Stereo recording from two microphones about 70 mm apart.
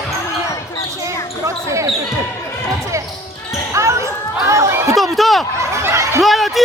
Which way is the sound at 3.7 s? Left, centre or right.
Right.